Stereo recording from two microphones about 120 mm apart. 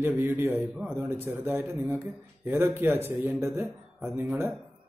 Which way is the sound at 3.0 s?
15° right (ahead or behind).